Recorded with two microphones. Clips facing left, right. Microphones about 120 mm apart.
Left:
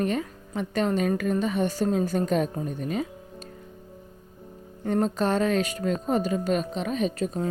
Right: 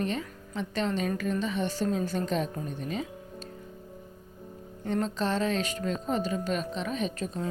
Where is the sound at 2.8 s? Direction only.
45° left (ahead or behind).